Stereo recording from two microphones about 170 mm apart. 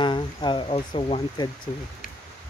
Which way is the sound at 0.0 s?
25° left (ahead or behind).